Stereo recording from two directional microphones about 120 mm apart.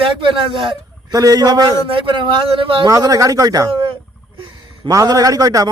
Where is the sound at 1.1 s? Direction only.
30° right (ahead or behind); by 2.8 s 50° right (ahead or behind).